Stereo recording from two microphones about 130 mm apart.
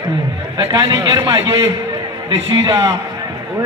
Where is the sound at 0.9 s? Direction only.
25° right (ahead or behind).